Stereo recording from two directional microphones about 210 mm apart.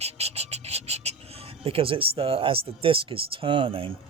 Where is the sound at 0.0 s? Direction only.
30° right (ahead or behind).